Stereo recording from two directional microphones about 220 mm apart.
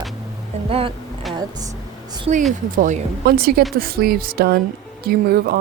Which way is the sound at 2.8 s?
35° right (ahead or behind).